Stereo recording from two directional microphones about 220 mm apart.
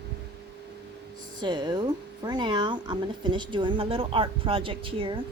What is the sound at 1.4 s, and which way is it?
Speech, 20° right (ahead or behind).